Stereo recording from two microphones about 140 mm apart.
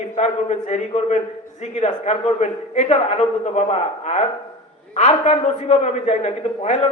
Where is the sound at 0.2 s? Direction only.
55° left (ahead or behind).